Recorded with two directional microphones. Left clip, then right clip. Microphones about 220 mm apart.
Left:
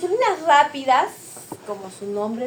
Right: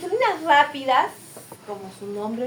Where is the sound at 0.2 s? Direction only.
20° left (ahead or behind).